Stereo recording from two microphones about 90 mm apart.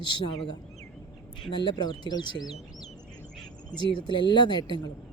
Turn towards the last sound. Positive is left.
turn(degrees=50)  # may be behind; listen again after turning